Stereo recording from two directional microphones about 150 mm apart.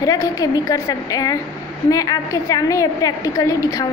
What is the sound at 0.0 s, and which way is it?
A woman's voice, 25° left (ahead or behind).